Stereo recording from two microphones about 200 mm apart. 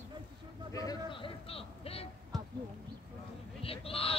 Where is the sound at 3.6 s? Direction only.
30° left (ahead or behind).